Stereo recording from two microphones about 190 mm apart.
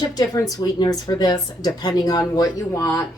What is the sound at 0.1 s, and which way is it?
A woman's voice, 20° left (ahead or behind).